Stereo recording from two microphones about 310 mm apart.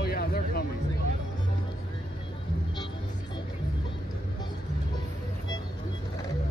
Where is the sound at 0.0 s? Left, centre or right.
Left.